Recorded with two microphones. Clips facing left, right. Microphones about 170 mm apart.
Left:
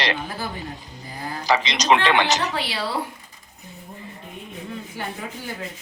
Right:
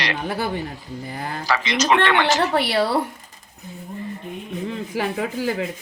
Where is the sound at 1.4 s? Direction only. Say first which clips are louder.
Even; 20° left (ahead or behind).